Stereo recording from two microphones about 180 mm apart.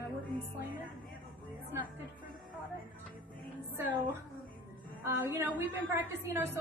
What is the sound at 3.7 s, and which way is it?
A woman's voice, 15° right (ahead or behind).